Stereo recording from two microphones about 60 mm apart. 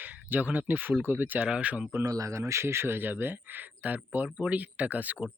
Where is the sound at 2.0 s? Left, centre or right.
Right.